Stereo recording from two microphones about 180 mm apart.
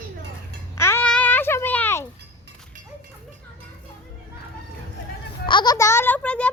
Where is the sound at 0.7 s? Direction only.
15° left (ahead or behind).